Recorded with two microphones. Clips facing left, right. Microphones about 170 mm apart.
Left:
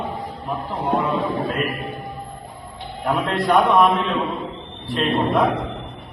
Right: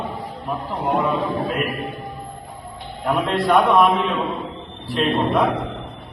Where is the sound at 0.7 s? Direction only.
10° right (ahead or behind).